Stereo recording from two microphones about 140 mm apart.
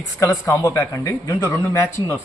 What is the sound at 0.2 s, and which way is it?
Speech, 20° left (ahead or behind).